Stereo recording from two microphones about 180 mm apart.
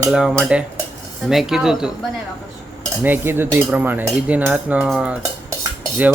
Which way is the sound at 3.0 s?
10° right (ahead or behind).